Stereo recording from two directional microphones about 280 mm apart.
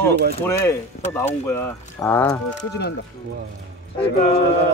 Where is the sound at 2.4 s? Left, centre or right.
Left.